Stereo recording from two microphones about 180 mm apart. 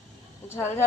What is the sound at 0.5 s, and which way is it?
Speech, 15° left (ahead or behind).